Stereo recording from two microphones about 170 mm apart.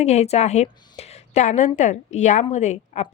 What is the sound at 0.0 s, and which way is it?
A woman's voice, 40° left (ahead or behind).